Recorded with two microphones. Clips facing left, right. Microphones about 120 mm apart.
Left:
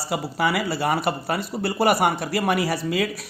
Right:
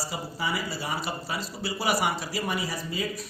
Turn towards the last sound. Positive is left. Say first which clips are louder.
# left 7 dB
turn(degrees=75)  # may be behind; listen again after turning